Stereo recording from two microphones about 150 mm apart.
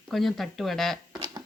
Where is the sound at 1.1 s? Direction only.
30° right (ahead or behind).